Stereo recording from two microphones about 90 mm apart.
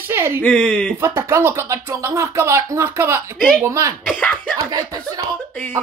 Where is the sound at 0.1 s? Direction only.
25° right (ahead or behind).